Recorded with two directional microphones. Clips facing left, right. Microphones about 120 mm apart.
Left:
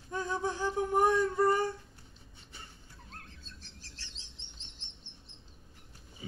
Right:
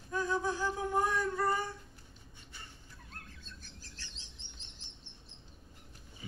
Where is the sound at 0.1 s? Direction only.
25° left (ahead or behind).